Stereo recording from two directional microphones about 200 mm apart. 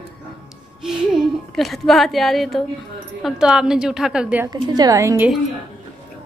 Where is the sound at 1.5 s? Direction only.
Centre (ahead or behind).